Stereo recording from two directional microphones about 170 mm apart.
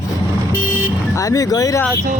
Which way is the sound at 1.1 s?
20° left (ahead or behind).